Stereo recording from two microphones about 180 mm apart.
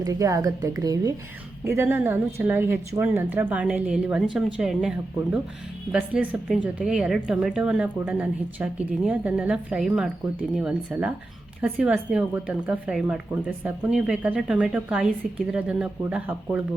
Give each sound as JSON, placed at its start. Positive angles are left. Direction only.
{"t": 0.0, "sound": "a woman's voice", "side_deg": -20}